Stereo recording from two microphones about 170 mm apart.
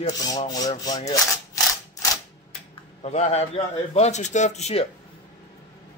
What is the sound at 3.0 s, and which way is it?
A man's voice, 40° left (ahead or behind).